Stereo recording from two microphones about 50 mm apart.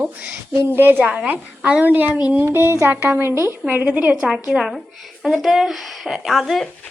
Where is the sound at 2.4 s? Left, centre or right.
Right.